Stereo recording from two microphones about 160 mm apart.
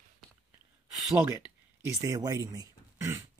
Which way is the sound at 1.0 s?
5° right (ahead or behind).